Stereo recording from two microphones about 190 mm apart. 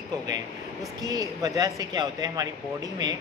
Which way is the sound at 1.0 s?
20° right (ahead or behind).